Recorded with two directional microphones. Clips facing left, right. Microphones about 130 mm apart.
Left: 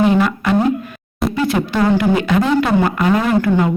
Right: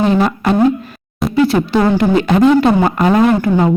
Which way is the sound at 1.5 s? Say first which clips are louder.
Right 3 dB; 30° right (ahead or behind).